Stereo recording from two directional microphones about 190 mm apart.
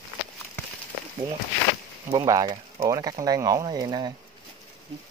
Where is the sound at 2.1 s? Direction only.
20° right (ahead or behind).